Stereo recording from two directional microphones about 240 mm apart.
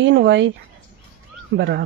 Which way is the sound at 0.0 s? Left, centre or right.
Right.